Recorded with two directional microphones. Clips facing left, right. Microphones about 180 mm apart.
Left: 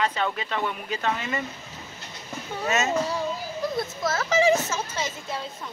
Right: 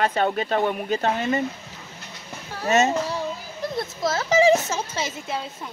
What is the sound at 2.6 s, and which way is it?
Child singing, 35° right (ahead or behind).